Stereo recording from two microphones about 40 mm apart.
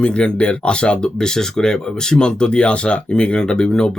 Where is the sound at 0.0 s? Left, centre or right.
Left.